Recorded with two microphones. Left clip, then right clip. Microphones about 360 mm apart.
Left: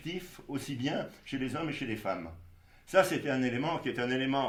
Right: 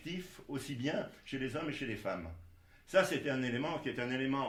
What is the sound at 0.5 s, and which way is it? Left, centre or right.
Speech, left.